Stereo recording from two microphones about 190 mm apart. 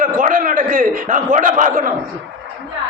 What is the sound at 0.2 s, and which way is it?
A man's voice, 45° right (ahead or behind).